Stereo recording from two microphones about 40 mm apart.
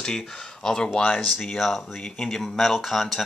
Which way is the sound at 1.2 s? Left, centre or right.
Centre.